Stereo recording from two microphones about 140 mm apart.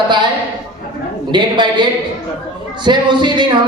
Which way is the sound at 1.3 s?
30° right (ahead or behind).